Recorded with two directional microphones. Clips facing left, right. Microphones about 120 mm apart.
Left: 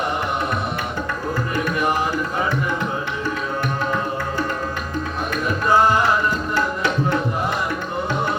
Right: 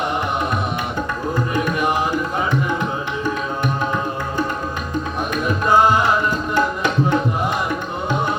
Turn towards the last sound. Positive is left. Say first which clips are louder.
# right 2 dB
turn(degrees=-15)  # may be behind; listen again after turning